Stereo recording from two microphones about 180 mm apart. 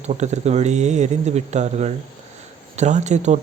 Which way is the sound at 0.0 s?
40° right (ahead or behind).